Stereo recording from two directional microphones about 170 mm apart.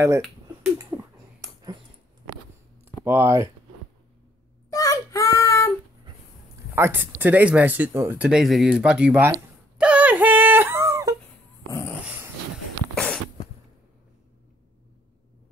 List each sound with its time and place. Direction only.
1.4 s dog: 25° right (ahead or behind)
3.1 s speech: 15° right (ahead or behind)
4.6 s child singing: 20° left (ahead or behind)
6.7 s speech: 15° right (ahead or behind)
9.8 s wail: 5° right (ahead or behind)
12.9 s cough: 5° left (ahead or behind)